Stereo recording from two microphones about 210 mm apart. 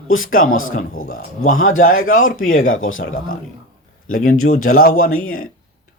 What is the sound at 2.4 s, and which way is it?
Speech, 75° left (ahead or behind).